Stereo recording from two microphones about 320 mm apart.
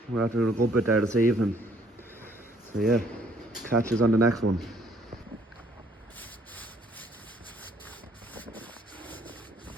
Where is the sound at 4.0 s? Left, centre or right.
Right.